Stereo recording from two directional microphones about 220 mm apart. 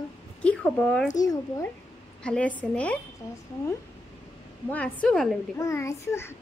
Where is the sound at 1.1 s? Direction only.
15° left (ahead or behind).